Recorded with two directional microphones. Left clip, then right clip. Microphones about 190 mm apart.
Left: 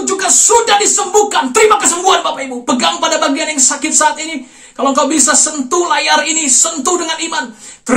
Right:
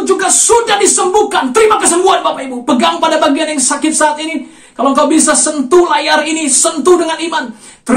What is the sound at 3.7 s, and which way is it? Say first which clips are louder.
Speech: right 1 dB; 20° left (ahead or behind).